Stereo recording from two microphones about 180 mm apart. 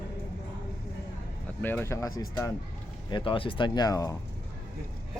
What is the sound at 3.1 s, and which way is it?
Speech, 30° left (ahead or behind).